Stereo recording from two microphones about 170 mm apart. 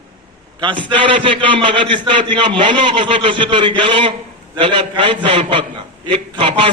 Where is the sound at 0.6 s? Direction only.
30° right (ahead or behind).